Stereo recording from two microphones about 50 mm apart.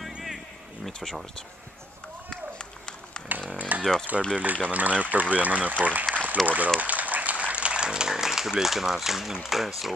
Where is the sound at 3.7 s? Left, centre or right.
Right.